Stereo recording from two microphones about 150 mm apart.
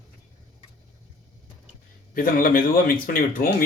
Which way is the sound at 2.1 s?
70° left (ahead or behind).